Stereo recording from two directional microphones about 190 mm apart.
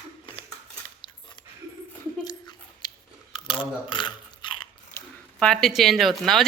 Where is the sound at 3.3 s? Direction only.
25° left (ahead or behind).